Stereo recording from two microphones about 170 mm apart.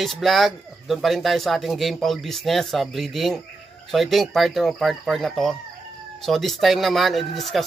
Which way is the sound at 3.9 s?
Centre (ahead or behind).